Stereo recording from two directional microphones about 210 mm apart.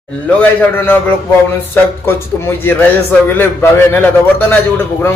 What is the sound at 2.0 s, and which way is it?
A man's voice, 10° left (ahead or behind).